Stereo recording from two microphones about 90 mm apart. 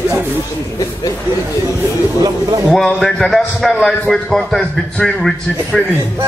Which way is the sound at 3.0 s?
5° left (ahead or behind).